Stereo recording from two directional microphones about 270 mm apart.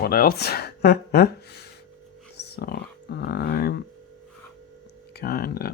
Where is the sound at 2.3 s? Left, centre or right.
Left.